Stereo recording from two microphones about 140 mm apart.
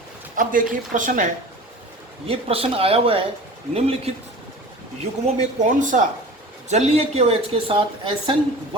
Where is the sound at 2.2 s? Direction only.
45° right (ahead or behind).